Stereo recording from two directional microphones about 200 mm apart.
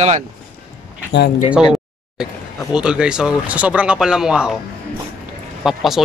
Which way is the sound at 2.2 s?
5° right (ahead or behind).